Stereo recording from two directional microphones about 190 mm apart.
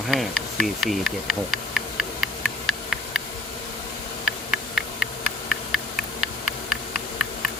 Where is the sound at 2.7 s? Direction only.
Centre (ahead or behind).